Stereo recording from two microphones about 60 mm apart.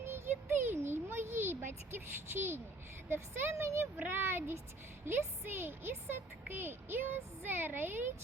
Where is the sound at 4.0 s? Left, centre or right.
Right.